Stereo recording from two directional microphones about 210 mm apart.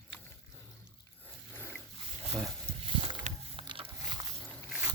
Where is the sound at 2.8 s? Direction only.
25° right (ahead or behind).